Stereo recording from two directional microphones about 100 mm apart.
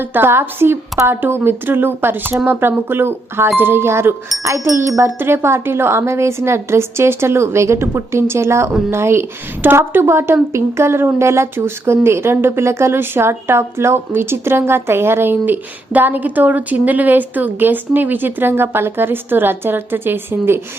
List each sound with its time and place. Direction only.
0.0 s speech: 20° right (ahead or behind)